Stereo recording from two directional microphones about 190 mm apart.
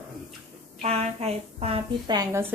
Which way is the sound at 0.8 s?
35° right (ahead or behind).